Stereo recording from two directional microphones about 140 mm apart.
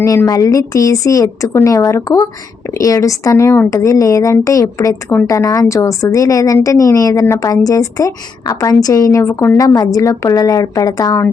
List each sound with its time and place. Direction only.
0.0 s a woman's voice: 25° left (ahead or behind)